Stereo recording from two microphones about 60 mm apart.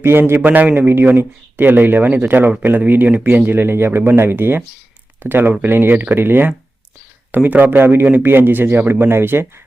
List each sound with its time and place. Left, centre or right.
0.0 s a man's voice: right